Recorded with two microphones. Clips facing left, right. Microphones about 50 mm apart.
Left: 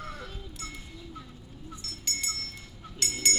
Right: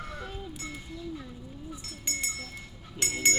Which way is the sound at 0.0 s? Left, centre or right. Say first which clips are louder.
Right 2 dB; centre.